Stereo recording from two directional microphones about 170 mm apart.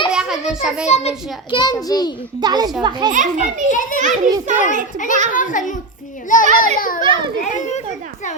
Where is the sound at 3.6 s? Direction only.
50° left (ahead or behind).